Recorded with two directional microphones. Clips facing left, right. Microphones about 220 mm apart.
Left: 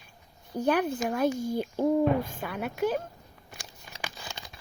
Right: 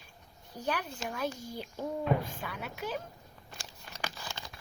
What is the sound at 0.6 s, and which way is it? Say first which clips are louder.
Speech: left 10 dB; 55° left (ahead or behind).